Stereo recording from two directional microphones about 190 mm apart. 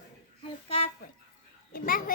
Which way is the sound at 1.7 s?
50° left (ahead or behind).